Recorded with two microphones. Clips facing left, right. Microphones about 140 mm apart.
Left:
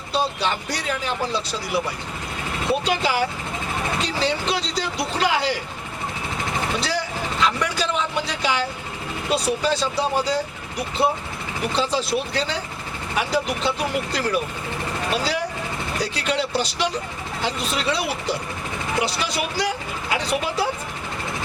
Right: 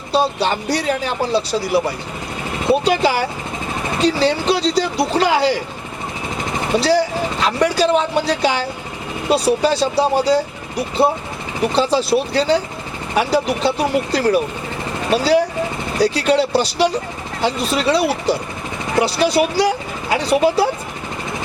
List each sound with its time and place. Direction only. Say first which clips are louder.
0.4 s speech: right 6 dB; 35° right (ahead or behind)
6.7 s speech: right 10 dB; 35° right (ahead or behind)
16.0 s speech: right 10 dB; 35° right (ahead or behind)